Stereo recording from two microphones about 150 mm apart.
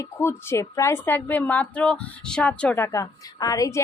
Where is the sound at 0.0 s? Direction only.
20° left (ahead or behind).